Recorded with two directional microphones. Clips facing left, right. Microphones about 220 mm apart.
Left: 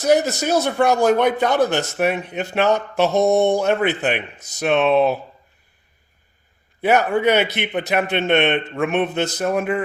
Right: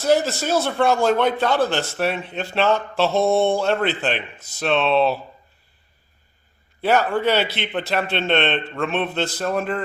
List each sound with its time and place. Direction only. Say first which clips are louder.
0.0 s a man's voice: left 2 dB; 15° left (ahead or behind)
6.8 s a man's voice: left 2 dB; 20° left (ahead or behind)
8.9 s a sound: left 3 dB; 20° left (ahead or behind)